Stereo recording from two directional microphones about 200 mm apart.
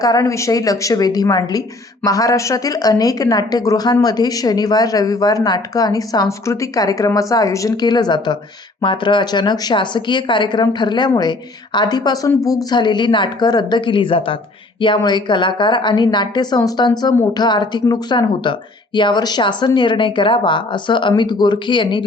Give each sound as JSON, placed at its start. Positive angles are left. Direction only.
{"t": 0.0, "sound": "a woman's voice", "side_deg": 15}